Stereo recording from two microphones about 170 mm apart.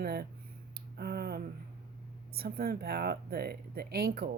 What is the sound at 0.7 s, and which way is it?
Finger snapping, 65° right (ahead or behind).